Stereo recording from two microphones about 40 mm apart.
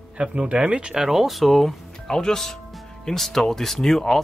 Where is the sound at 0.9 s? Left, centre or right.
Centre.